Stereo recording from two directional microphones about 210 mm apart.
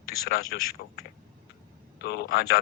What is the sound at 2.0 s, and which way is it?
Speech, 50° left (ahead or behind).